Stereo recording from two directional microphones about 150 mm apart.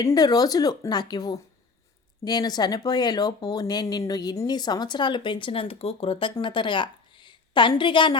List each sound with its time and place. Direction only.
0.0 s speech: 25° left (ahead or behind)